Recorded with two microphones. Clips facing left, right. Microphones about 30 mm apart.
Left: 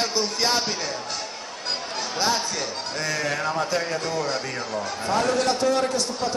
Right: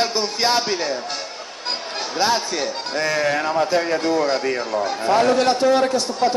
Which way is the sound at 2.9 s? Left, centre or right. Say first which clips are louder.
Right 7 dB; right.